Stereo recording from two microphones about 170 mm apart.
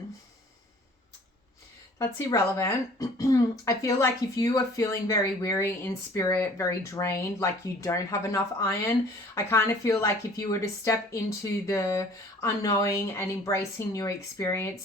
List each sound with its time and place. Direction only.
2.0 s speech: 15° left (ahead or behind)